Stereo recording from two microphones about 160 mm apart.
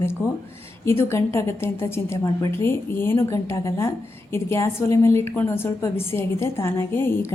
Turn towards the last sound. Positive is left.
turn(degrees=15)  # may be behind; listen again after turning